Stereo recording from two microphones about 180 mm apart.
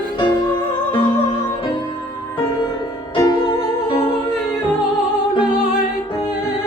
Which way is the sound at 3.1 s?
25° left (ahead or behind).